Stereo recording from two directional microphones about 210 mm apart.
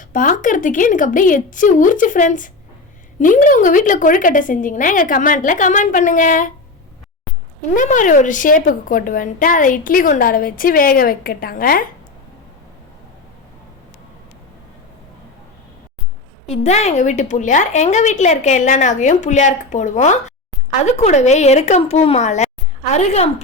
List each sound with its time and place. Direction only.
0.1 s a woman's voice: 40° left (ahead or behind)
7.8 s a woman's voice: 35° left (ahead or behind)
16.5 s a woman's voice: 30° left (ahead or behind)